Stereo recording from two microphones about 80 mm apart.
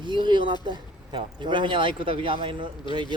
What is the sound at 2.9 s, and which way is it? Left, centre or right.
Speech, right.